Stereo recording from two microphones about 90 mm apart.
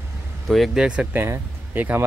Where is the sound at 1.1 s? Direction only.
25° right (ahead or behind).